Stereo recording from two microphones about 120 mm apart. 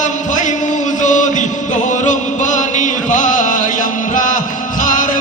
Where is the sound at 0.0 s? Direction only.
90° left.